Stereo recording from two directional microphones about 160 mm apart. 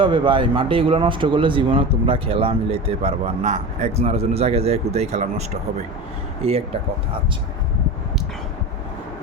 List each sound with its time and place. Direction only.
0.0 s speech: 30° right (ahead or behind)